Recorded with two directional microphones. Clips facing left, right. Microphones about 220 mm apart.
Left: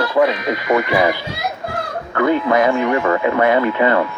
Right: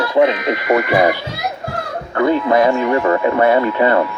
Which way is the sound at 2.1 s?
30° right (ahead or behind).